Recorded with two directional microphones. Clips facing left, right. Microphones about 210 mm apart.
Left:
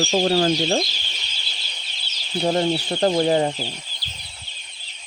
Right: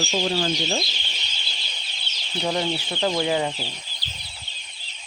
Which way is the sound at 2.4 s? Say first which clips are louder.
Left 5 dB; 35° left (ahead or behind).